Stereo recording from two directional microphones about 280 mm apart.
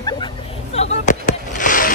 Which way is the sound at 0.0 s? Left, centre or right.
Centre.